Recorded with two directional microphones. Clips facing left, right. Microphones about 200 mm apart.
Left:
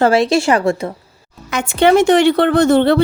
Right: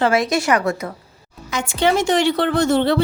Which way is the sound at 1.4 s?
60° left (ahead or behind).